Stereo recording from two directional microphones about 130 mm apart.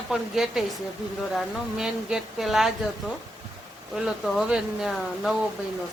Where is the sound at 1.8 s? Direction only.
5° right (ahead or behind).